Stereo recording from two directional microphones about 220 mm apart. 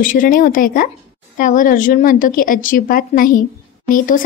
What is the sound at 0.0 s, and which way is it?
A woman's voice, 40° left (ahead or behind).